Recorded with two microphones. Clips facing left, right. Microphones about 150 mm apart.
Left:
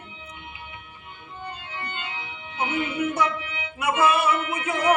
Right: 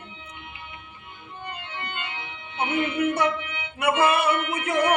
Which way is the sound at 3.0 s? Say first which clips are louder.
Right 1 dB; 60° right (ahead or behind).